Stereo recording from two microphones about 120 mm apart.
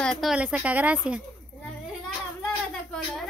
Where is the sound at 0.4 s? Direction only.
10° right (ahead or behind).